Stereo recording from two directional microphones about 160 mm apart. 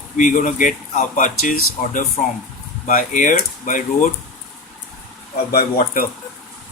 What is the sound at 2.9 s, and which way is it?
Speech, 55° left (ahead or behind).